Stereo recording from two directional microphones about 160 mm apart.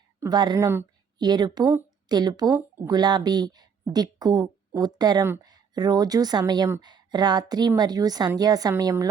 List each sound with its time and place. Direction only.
0.2 s a woman's voice: 25° right (ahead or behind)